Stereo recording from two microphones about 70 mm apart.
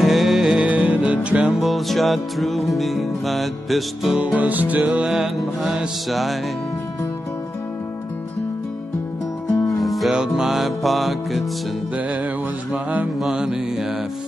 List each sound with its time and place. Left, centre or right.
0.0 s music: centre
0.5 s music: centre
1.6 s music: centre
4.2 s music: right
4.8 s music: centre
9.8 s music: centre
10.1 s music: centre
12.7 s music: right
13.2 s music: centre